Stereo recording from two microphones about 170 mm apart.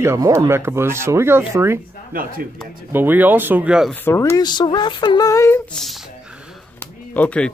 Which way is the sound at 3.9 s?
15° left (ahead or behind).